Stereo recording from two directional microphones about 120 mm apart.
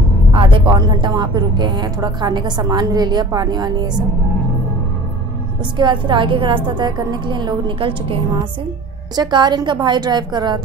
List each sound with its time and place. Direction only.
0.3 s a woman's voice: 45° right (ahead or behind)
5.8 s a woman's voice: 40° right (ahead or behind)
9.1 s a woman's voice: 35° right (ahead or behind)